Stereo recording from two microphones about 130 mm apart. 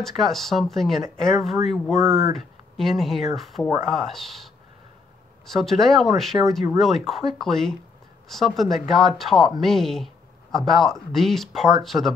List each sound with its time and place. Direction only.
0.0 s speech: centre (ahead or behind)
5.5 s speech: centre (ahead or behind)